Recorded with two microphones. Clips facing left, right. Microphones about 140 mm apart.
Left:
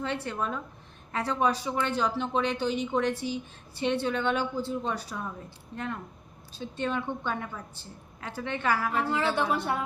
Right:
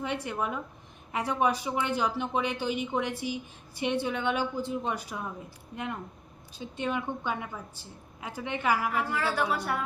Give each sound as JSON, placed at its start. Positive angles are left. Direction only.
{"t": 0.0, "sound": "speech", "side_deg": -15}
{"t": 9.0, "sound": "a woman's voice", "side_deg": 20}